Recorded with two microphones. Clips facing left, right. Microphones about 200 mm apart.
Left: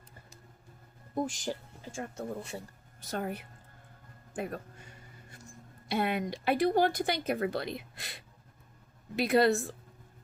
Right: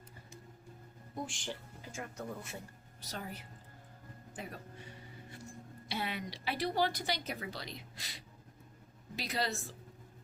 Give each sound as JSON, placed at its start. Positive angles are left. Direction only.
{"t": 1.1, "sound": "speech", "side_deg": 40}
{"t": 3.0, "sound": "a woman's voice", "side_deg": 55}
{"t": 4.4, "sound": "music", "side_deg": 55}
{"t": 5.9, "sound": "a woman's voice", "side_deg": 55}